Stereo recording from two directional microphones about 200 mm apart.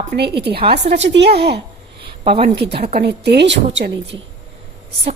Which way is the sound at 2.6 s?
55° right (ahead or behind).